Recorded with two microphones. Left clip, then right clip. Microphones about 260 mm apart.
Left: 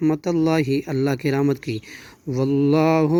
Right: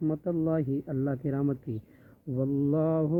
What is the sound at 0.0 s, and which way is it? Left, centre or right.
Mantra, left.